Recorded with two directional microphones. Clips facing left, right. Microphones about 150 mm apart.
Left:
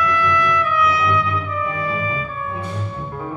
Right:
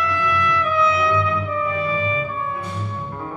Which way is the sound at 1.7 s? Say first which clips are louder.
Right 2 dB; 25° right (ahead or behind).